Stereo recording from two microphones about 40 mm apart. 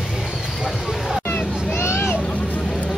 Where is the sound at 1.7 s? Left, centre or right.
Left.